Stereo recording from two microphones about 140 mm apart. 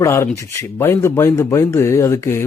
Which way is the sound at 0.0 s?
20° left (ahead or behind).